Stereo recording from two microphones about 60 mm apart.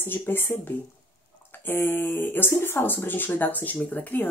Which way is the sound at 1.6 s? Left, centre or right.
Left.